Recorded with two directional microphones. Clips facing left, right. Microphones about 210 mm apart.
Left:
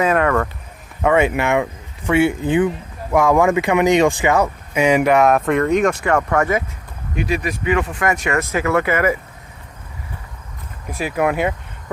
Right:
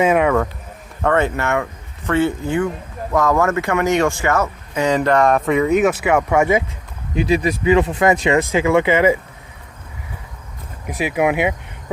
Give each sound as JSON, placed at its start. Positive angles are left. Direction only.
{"t": 0.1, "sound": "speech", "side_deg": -10}
{"t": 1.0, "sound": "speech", "side_deg": 10}
{"t": 7.2, "sound": "speech", "side_deg": -30}
{"t": 10.8, "sound": "speech", "side_deg": -15}